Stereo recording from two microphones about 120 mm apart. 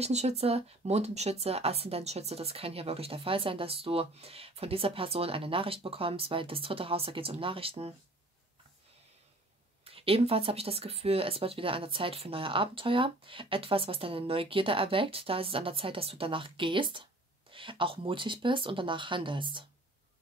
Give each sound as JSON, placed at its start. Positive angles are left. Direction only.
{"t": 0.0, "sound": "speech", "side_deg": -65}
{"t": 9.8, "sound": "speech", "side_deg": -50}